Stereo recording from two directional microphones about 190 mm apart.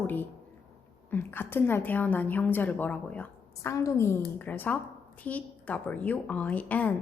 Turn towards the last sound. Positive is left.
turn(degrees=10)  # may be behind; listen again after turning